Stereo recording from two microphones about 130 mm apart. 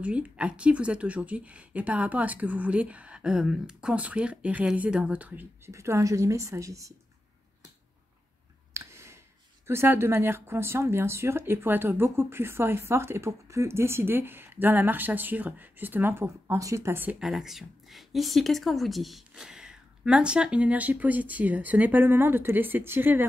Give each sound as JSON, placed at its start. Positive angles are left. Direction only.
{"t": 0.0, "sound": "speech", "side_deg": -10}
{"t": 8.7, "sound": "a sound", "side_deg": -20}
{"t": 9.7, "sound": "speech", "side_deg": -20}
{"t": 17.2, "sound": "speech", "side_deg": -5}